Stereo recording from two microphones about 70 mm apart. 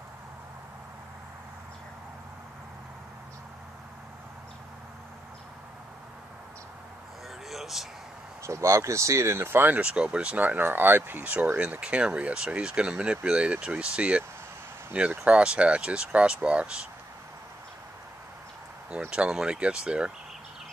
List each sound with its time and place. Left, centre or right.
7.4 s speech: centre
8.4 s speech: right
9.8 s speech: centre
19.0 s speech: centre